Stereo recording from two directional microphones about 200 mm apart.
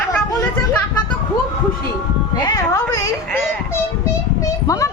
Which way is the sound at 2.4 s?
20° left (ahead or behind).